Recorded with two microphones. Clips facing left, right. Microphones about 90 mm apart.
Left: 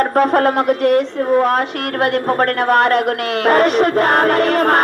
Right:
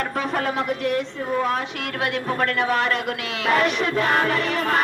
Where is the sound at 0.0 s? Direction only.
50° left (ahead or behind).